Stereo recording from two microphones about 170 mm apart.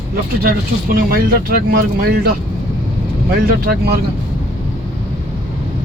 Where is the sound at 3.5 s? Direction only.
60° right (ahead or behind).